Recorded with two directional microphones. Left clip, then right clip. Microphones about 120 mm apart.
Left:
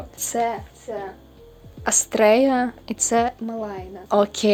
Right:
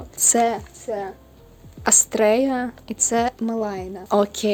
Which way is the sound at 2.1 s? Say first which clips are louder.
Left 5 dB; 15° right (ahead or behind).